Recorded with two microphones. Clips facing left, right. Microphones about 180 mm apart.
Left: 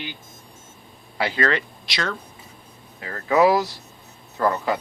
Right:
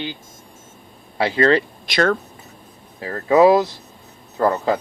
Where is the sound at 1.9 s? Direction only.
50° right (ahead or behind).